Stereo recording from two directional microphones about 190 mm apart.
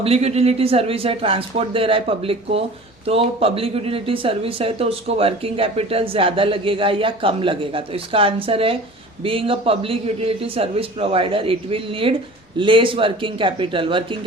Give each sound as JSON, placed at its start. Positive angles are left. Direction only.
{"t": 0.0, "sound": "speech", "side_deg": -30}